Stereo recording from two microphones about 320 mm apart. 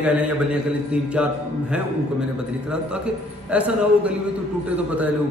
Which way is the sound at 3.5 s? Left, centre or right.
Centre.